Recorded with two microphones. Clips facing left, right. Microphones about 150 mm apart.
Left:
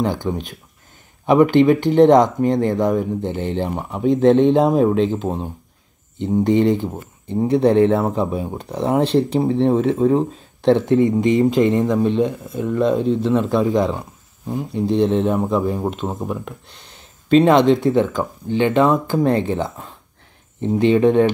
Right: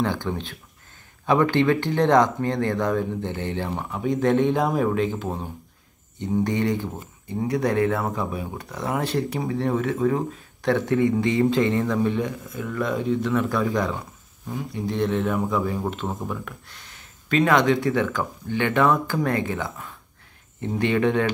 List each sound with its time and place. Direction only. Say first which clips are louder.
0.0 s speech: left 4 dB; 15° left (ahead or behind)